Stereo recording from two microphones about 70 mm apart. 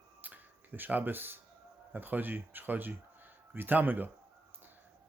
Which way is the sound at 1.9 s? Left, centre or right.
Right.